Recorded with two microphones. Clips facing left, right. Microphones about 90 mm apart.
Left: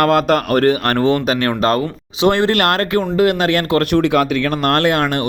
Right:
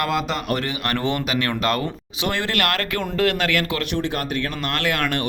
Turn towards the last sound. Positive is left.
turn(degrees=25)  # may be behind; listen again after turning